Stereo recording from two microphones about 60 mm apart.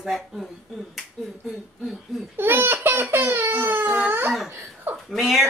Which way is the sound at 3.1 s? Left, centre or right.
Right.